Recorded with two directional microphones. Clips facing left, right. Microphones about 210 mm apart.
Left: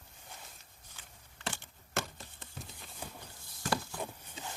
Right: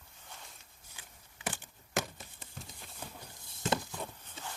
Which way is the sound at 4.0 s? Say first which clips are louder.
Left 2 dB; 15° left (ahead or behind).